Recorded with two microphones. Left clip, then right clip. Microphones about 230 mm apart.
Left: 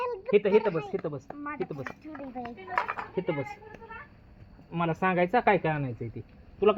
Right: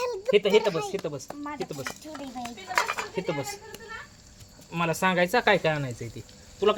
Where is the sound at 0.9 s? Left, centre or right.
Centre.